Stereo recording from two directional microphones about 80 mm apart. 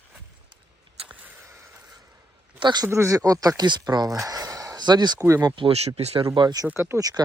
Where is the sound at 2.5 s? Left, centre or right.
Right.